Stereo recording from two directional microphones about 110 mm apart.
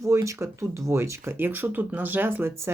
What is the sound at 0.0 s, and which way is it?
Speech, 25° right (ahead or behind).